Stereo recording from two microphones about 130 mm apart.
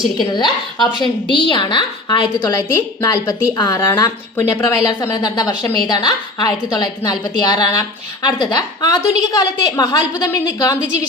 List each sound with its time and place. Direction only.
0.3 s a woman's voice: 35° left (ahead or behind)
2.4 s a woman's voice: 20° left (ahead or behind)
5.1 s a woman's voice: 30° left (ahead or behind)